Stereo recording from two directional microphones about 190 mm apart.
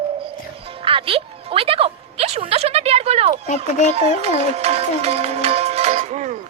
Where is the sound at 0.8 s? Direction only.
30° right (ahead or behind).